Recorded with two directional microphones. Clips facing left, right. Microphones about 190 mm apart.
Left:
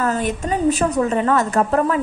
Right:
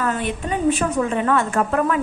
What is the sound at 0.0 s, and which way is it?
A woman's voice, 40° left (ahead or behind).